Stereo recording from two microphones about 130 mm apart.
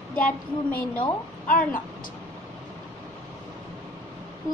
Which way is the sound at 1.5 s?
90° left.